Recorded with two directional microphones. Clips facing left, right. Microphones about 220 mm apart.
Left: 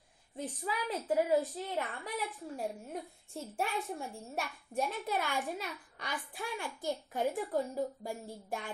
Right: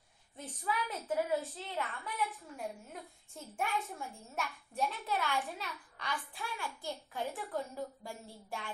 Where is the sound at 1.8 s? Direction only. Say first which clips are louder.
Even; 15° left (ahead or behind).